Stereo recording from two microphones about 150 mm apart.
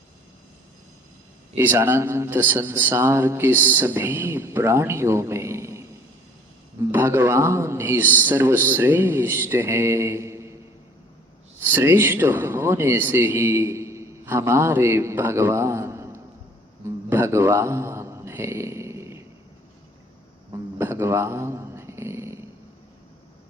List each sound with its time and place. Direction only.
1.5 s a man's voice: 15° right (ahead or behind)
6.9 s a man's voice: 15° right (ahead or behind)
11.6 s speech: 15° right (ahead or behind)
16.8 s mantra: 15° right (ahead or behind)
20.5 s a sound: 15° right (ahead or behind)